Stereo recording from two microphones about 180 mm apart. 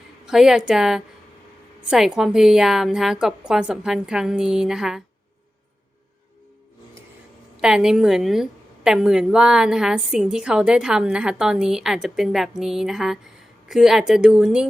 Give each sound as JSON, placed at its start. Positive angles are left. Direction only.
{"t": 0.3, "sound": "a woman's voice", "side_deg": -5}
{"t": 7.5, "sound": "a woman's voice", "side_deg": -5}